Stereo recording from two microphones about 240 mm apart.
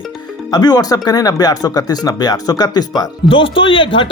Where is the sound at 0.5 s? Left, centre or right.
Centre.